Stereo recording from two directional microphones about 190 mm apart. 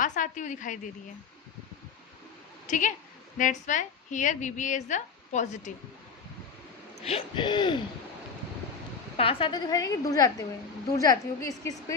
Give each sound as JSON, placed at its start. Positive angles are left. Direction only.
{"t": 0.0, "sound": "a woman's voice", "side_deg": 40}
{"t": 2.6, "sound": "a woman's voice", "side_deg": 40}
{"t": 7.0, "sound": "a woman's voice", "side_deg": 30}
{"t": 9.1, "sound": "a woman's voice", "side_deg": 30}